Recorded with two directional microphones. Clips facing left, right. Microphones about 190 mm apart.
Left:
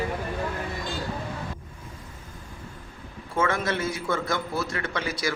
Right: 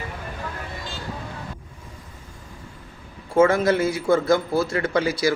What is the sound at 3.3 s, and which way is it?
A man's voice, 30° right (ahead or behind).